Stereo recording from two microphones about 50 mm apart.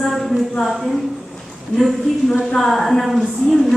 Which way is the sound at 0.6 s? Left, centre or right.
Centre.